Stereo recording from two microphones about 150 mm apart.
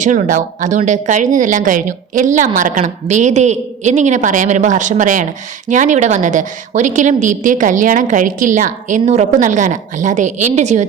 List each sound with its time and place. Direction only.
0.0 s a woman's voice: 55° right (ahead or behind)